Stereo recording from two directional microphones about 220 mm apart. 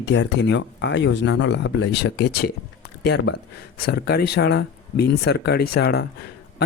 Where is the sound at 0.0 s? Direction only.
55° left (ahead or behind).